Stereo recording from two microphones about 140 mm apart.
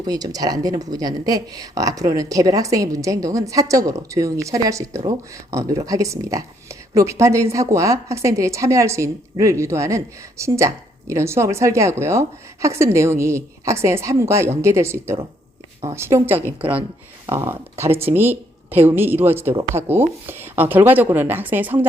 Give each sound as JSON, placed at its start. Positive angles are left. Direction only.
{"t": 0.0, "sound": "a woman's voice", "side_deg": -25}